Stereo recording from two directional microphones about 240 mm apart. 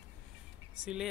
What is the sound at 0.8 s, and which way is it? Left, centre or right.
Speech, centre.